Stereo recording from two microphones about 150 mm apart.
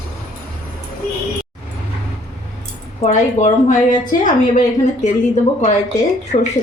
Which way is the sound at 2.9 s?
50° left (ahead or behind).